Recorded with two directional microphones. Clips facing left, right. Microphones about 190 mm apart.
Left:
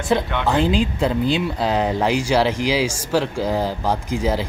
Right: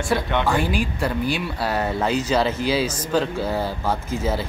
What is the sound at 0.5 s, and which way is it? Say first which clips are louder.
A man's voice: left 4 dB; 20° left (ahead or behind).